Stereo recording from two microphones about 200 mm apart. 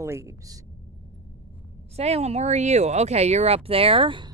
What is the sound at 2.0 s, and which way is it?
Speech, 30° right (ahead or behind).